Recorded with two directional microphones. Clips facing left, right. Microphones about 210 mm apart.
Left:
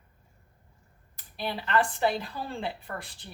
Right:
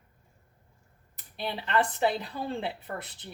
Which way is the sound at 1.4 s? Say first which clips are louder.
Left 1 dB; 20° right (ahead or behind).